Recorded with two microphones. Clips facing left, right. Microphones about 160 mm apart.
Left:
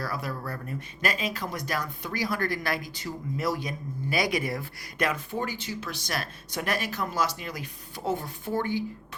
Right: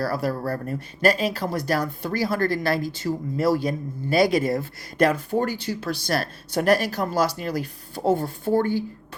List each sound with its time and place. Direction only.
0.0 s speech: 35° right (ahead or behind)